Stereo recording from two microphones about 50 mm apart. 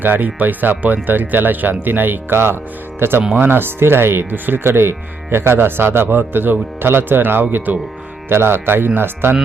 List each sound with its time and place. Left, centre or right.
0.0 s speech: right
3.2 s speech: right
3.5 s speech: right
8.3 s speech: right